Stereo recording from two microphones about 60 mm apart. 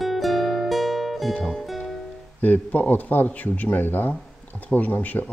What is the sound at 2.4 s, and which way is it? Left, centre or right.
Speech, left.